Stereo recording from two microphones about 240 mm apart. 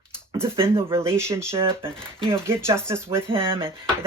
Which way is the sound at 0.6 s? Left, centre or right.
Centre.